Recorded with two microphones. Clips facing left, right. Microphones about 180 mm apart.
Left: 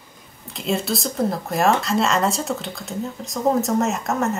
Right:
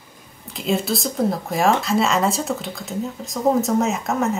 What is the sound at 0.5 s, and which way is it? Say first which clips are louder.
Speech: right 1 dB; centre (ahead or behind).